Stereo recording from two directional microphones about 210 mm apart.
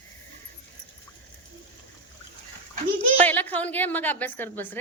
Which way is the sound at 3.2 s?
10° left (ahead or behind).